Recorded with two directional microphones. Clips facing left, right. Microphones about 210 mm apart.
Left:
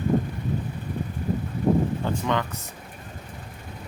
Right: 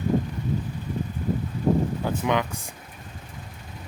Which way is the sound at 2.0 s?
15° right (ahead or behind).